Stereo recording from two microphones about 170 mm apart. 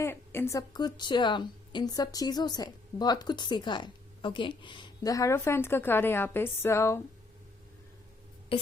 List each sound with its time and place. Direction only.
0.0 s a woman's voice: 15° left (ahead or behind)